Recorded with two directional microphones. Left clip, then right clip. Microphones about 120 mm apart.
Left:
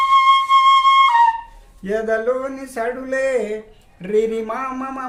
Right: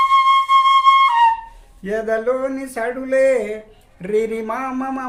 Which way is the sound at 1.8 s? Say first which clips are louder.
Even; 15° right (ahead or behind).